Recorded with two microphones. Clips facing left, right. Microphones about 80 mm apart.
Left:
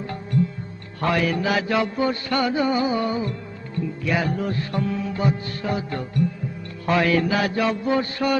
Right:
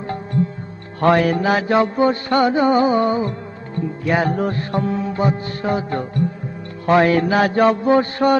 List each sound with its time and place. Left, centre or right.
1.0 s music: right